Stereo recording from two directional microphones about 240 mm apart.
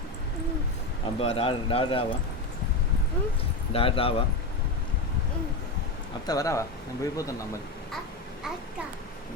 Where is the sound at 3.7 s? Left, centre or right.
Left.